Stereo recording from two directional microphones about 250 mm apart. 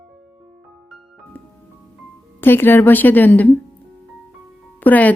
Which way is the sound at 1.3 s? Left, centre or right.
Centre.